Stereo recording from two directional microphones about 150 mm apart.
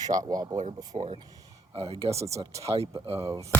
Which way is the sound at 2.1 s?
20° right (ahead or behind).